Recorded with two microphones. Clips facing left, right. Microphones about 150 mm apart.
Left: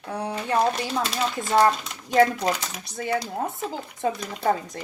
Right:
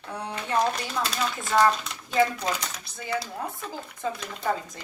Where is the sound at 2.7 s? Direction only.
50° left (ahead or behind).